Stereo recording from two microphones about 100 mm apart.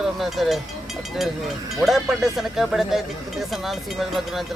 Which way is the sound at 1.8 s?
Centre (ahead or behind).